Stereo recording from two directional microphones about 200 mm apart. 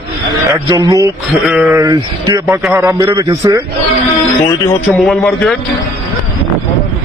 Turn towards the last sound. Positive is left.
turn(degrees=0)  # may be behind; listen again after turning